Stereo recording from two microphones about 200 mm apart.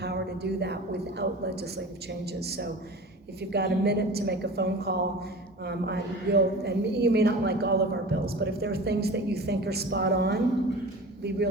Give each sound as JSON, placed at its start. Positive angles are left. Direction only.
{"t": 0.0, "sound": "a woman's voice", "side_deg": -55}